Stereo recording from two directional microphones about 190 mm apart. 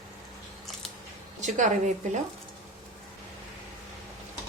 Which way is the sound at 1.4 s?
40° right (ahead or behind).